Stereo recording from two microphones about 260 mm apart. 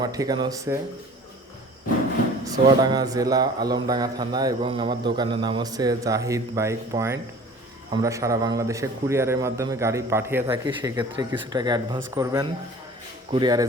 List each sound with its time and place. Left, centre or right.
0.0 s a man's voice: centre
2.4 s a man's voice: centre